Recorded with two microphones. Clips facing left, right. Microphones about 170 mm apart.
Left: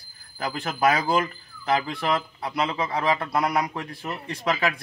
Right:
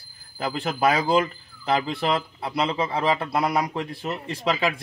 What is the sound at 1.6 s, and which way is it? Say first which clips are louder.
Speech: right 1 dB; 30° right (ahead or behind).